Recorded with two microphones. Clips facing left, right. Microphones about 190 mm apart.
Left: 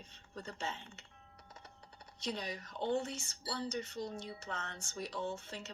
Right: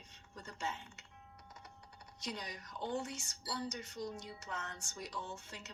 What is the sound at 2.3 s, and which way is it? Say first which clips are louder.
Speech: left 4 dB; 30° left (ahead or behind).